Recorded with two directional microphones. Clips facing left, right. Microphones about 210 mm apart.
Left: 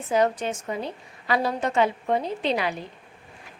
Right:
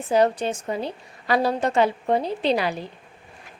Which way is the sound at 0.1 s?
35° right (ahead or behind).